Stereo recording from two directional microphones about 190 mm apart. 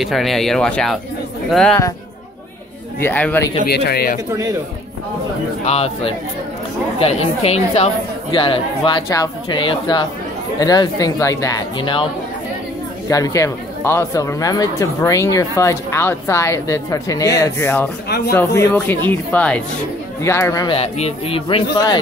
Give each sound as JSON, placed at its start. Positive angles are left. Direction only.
{"t": 0.0, "sound": "speech", "side_deg": 0}
{"t": 3.0, "sound": "speech", "side_deg": 10}
{"t": 3.6, "sound": "a man's voice", "side_deg": 55}
{"t": 5.7, "sound": "a woman's voice", "side_deg": 30}
{"t": 13.1, "sound": "speech", "side_deg": 15}
{"t": 18.0, "sound": "a man's voice", "side_deg": 55}
{"t": 18.3, "sound": "speech", "side_deg": 10}
{"t": 20.7, "sound": "a woman's voice", "side_deg": 30}